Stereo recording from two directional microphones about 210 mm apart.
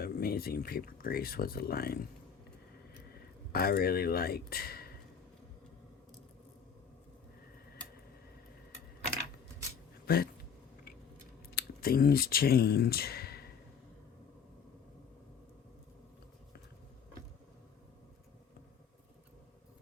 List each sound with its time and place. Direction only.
0.0 s speech: 45° left (ahead or behind)
3.5 s speech: 45° left (ahead or behind)
10.1 s speech: 45° left (ahead or behind)
11.5 s speech: 45° left (ahead or behind)